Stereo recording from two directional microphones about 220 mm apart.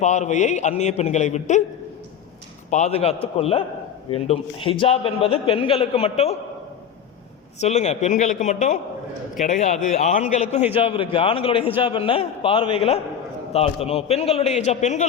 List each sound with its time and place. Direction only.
0.0 s speech: 30° left (ahead or behind)
2.6 s a man's voice: 30° left (ahead or behind)
7.6 s a man's voice: 30° left (ahead or behind)